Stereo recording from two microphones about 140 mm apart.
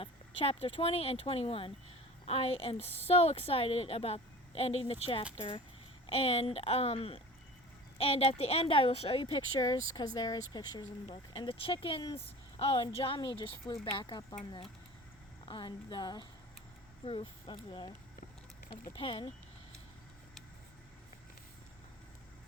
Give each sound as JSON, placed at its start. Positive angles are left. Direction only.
{"t": 0.0, "sound": "a woman's voice", "side_deg": 40}
{"t": 9.6, "sound": "speech", "side_deg": 25}
{"t": 15.4, "sound": "speech", "side_deg": 30}